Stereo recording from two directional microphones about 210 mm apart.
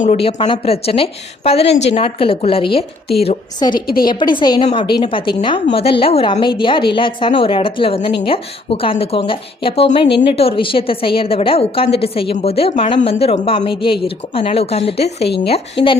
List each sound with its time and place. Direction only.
0.0 s a woman's voice: 30° left (ahead or behind)
3.8 s a woman's voice: 45° left (ahead or behind)
4.0 s a woman's voice: 20° left (ahead or behind)